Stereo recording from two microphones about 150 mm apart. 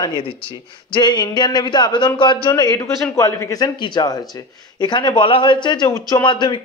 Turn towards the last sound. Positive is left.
turn(degrees=30)  # may be behind; listen again after turning